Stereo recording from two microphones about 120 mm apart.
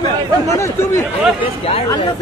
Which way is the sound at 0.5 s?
25° left (ahead or behind).